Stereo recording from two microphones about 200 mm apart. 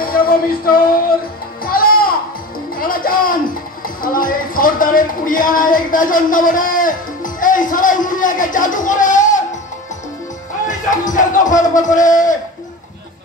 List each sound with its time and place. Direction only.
0.0 s a sound: 45° left (ahead or behind)
1.6 s music: 45° left (ahead or behind)
3.8 s speech: 45° left (ahead or behind)
10.7 s a man's voice: 40° left (ahead or behind)